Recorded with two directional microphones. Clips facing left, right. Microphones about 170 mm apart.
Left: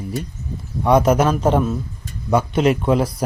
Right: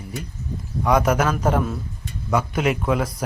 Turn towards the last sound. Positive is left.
turn(degrees=30)  # may be behind; listen again after turning